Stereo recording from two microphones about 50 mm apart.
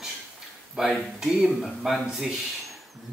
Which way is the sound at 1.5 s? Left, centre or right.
Centre.